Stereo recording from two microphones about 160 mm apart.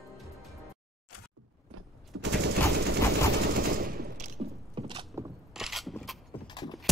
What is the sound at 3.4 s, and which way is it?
Machine gun, 60° right (ahead or behind).